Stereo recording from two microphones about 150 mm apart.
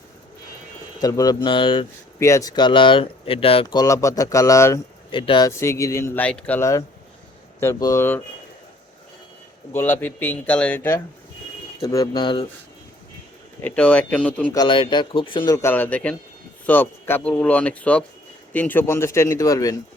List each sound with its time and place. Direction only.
0.9 s speech: 25° left (ahead or behind)
2.1 s speech: 20° left (ahead or behind); by 3.8 s 35° left (ahead or behind)
3.8 s speech: 20° left (ahead or behind)
5.1 s speech: 35° left (ahead or behind)
5.5 s speech: 20° left (ahead or behind)
9.7 s speech: 15° left (ahead or behind)
11.8 s speech: 25° left (ahead or behind)
13.6 s speech: 10° left (ahead or behind)
14.5 s speech: 30° left (ahead or behind)
15.6 s speech: 10° left (ahead or behind)